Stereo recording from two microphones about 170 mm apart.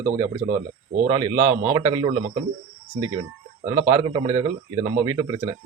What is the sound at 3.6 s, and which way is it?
Speech, 20° right (ahead or behind).